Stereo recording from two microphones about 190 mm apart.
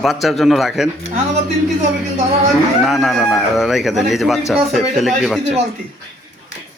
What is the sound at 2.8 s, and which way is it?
Speech, centre (ahead or behind).